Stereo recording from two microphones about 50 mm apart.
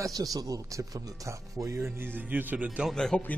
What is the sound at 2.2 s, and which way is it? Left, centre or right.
Speech, right.